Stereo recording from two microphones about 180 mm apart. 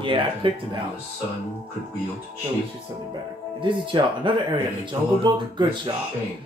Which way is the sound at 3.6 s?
25° right (ahead or behind).